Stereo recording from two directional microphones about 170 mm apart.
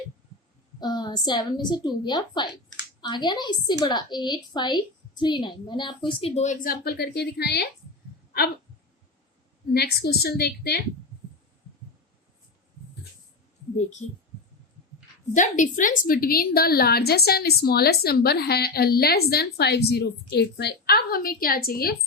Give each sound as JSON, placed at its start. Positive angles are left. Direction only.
{"t": 0.8, "sound": "a woman's voice", "side_deg": 25}
{"t": 9.7, "sound": "a woman's voice", "side_deg": 70}
{"t": 15.4, "sound": "a woman's voice", "side_deg": 45}